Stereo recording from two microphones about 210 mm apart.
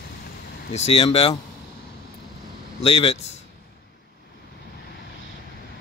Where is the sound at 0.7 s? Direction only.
30° left (ahead or behind).